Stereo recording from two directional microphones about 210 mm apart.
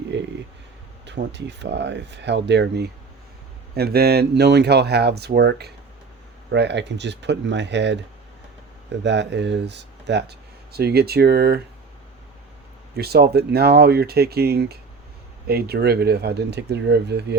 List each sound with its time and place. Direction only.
0.1 s speech: 60° right (ahead or behind)
9.0 s speech: 55° right (ahead or behind)
13.0 s speech: 50° right (ahead or behind)